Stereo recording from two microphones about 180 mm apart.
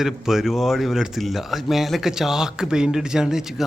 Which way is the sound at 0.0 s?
Centre (ahead or behind).